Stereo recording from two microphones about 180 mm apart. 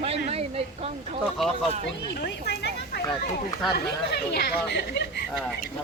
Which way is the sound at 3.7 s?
65° left (ahead or behind).